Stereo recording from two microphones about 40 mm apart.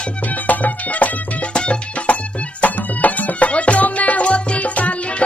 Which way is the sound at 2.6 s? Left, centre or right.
Left.